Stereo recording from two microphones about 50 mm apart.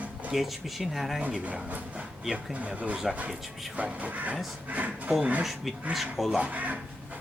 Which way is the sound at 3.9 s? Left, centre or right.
Right.